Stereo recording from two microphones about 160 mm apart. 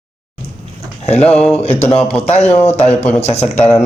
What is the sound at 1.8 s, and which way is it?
A man's voice, 40° left (ahead or behind).